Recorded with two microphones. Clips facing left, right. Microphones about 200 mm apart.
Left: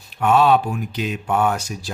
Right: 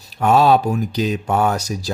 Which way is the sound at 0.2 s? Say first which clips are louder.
Right 2 dB; 40° right (ahead or behind).